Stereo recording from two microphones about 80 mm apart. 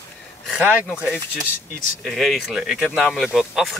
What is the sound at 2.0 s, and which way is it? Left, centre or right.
Speech, centre.